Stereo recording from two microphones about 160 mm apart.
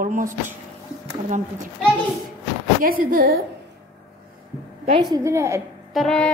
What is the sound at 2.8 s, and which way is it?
Speech, 60° right (ahead or behind).